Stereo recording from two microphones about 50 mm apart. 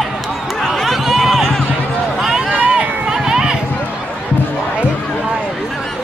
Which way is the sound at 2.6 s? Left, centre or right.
Right.